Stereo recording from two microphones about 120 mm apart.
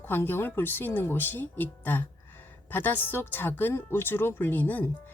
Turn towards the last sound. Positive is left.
turn(degrees=15)  # may be behind; listen again after turning